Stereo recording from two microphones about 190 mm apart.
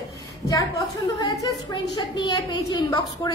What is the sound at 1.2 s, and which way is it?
A woman's voice, 20° left (ahead or behind).